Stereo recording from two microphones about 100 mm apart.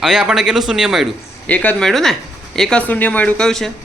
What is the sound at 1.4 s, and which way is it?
A man's voice, 15° left (ahead or behind).